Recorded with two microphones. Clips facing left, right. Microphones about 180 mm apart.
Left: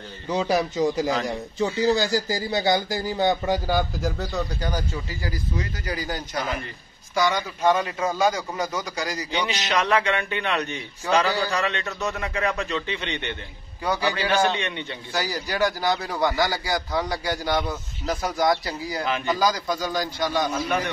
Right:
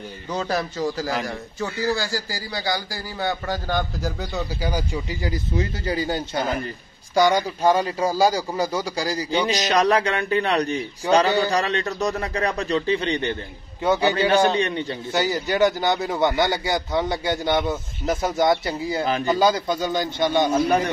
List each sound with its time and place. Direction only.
0.3 s a man's voice: 15° left (ahead or behind)
4.0 s speech: centre (ahead or behind)
5.2 s a man's voice: 25° right (ahead or behind)
13.8 s a man's voice: 25° right (ahead or behind)